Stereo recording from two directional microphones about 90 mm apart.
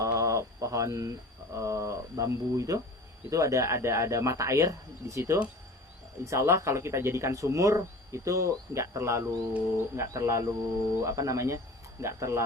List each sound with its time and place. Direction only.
0.0 s a sound: 35° right (ahead or behind)
1.5 s speech: 35° right (ahead or behind)
9.5 s speech: 15° right (ahead or behind)
9.9 s speech: 30° right (ahead or behind)